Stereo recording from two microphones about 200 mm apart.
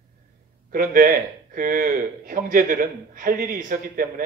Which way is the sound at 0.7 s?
45° right (ahead or behind).